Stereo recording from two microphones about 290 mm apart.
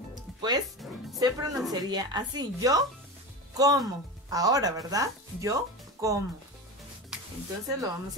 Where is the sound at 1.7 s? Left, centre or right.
Centre.